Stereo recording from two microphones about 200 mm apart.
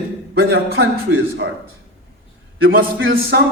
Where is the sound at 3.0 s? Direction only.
55° right (ahead or behind).